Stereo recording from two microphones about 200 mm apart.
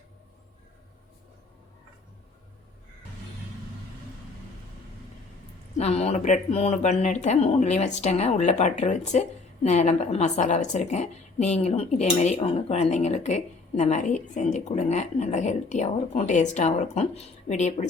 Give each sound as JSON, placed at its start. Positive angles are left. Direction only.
{"t": 5.7, "sound": "a woman's voice", "side_deg": 30}